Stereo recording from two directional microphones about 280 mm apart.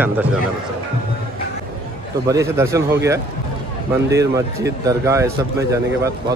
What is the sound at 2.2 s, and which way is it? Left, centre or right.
Speech, centre.